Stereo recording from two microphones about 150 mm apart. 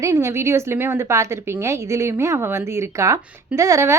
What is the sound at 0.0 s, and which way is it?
Speech, 20° right (ahead or behind).